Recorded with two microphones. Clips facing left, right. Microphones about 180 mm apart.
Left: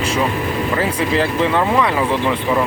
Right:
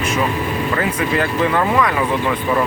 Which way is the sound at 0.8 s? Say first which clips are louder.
Left 2 dB; 30° left (ahead or behind).